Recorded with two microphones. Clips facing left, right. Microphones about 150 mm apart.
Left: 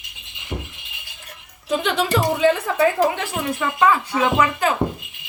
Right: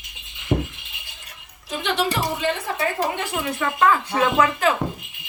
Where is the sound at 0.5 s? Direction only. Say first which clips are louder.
Right 8 dB; 40° right (ahead or behind).